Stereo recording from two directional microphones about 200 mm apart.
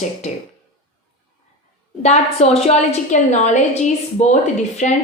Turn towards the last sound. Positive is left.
turn(degrees=35)  # may be behind; listen again after turning